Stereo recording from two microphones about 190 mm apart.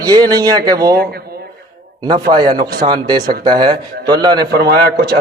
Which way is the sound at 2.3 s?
20° right (ahead or behind).